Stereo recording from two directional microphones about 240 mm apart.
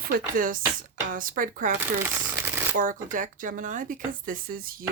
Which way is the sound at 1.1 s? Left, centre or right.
Right.